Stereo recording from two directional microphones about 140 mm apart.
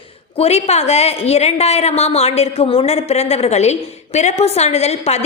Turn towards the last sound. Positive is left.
turn(degrees=50)  # may be behind; listen again after turning